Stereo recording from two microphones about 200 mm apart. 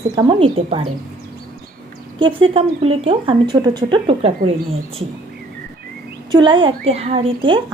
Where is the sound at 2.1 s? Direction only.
25° right (ahead or behind).